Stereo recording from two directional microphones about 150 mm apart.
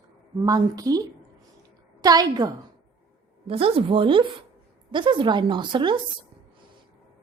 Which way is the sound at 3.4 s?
40° right (ahead or behind).